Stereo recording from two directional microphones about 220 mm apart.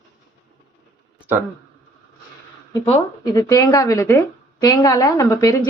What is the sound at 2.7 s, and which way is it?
Speech, 15° left (ahead or behind).